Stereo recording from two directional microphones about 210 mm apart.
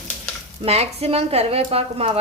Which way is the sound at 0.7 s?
30° right (ahead or behind).